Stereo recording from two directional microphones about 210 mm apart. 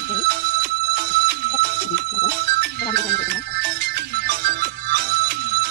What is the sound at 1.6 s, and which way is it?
Telephone bell ringing, 50° right (ahead or behind).